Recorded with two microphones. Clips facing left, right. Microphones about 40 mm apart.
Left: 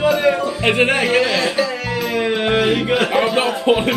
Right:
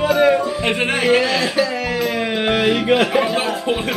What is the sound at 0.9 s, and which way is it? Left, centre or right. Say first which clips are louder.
Speech: even; centre.